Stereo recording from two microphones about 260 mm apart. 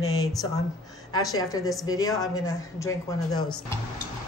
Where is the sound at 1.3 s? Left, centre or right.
Centre.